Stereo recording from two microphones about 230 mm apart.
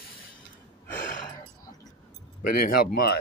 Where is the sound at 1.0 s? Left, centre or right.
Left.